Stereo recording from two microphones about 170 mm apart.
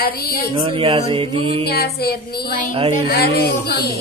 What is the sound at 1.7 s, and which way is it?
Music, 70° left (ahead or behind).